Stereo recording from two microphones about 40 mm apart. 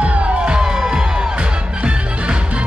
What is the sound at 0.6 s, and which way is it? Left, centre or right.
Music, centre.